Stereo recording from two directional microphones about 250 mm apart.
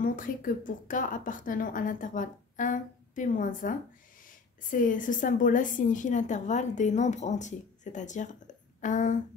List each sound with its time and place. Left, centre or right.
0.0 s a woman's voice: left